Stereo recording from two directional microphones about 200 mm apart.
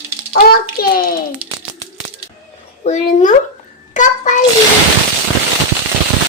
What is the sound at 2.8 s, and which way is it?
A woman's voice, 40° left (ahead or behind).